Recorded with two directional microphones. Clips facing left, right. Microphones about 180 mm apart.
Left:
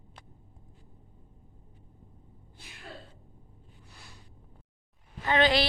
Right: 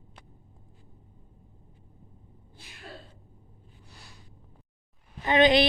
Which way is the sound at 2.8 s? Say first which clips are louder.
Right 1 dB; centre (ahead or behind).